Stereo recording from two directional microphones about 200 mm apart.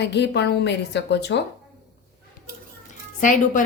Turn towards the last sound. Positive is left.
turn(degrees=40)  # may be behind; listen again after turning